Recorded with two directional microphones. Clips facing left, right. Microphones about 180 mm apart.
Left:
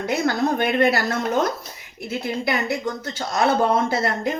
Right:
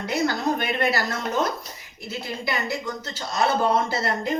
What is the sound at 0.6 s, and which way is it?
Speech, 60° left (ahead or behind).